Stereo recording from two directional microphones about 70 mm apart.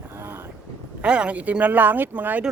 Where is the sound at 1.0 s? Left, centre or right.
Centre.